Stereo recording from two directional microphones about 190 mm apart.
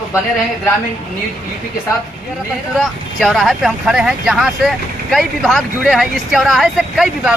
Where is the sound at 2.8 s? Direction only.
Centre (ahead or behind).